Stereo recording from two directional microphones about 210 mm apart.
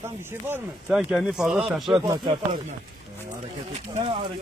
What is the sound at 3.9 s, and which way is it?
Speech, 25° right (ahead or behind).